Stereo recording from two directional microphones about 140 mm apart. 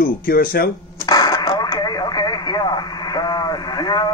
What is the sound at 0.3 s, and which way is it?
Speech, 90° left.